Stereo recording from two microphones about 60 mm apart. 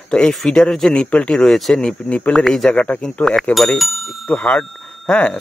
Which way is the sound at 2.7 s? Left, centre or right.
Left.